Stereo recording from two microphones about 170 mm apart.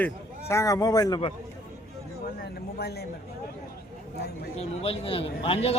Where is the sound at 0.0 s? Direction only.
15° left (ahead or behind).